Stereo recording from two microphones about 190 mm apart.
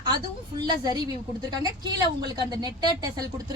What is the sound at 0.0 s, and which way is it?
A woman's voice, 20° right (ahead or behind).